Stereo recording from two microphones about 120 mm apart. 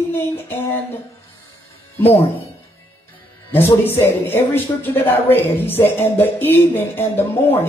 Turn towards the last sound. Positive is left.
turn(degrees=15)  # may be behind; listen again after turning